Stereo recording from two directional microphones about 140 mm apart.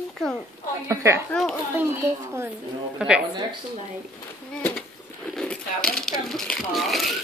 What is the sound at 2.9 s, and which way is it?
Speech, 5° right (ahead or behind).